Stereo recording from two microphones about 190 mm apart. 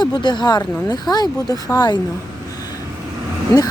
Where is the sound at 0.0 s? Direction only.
25° left (ahead or behind).